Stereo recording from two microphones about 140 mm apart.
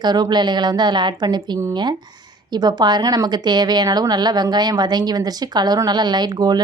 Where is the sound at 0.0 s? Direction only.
30° right (ahead or behind).